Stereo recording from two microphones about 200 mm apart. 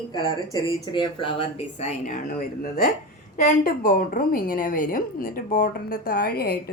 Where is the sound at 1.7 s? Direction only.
35° left (ahead or behind).